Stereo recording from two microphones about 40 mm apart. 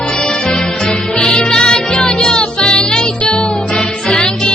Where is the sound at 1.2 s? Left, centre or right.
Centre.